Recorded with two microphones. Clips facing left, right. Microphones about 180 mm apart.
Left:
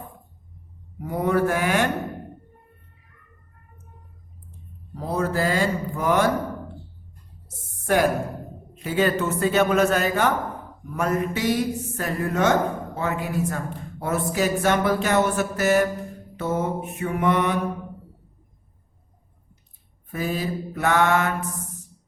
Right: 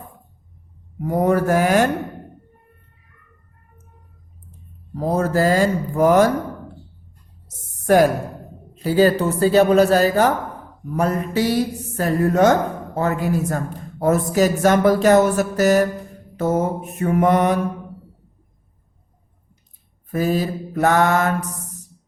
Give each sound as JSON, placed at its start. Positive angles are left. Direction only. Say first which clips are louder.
{"t": 1.0, "sound": "speech", "louder": "right 4 dB", "side_deg": -45}
{"t": 4.9, "sound": "speech", "louder": "right 5 dB", "side_deg": -45}
{"t": 7.4, "sound": "a sound", "louder": "right 7 dB", "side_deg": -40}
{"t": 8.7, "sound": "speech", "louder": "right 6 dB", "side_deg": -35}
{"t": 20.1, "sound": "speech", "louder": "right 6 dB", "side_deg": -40}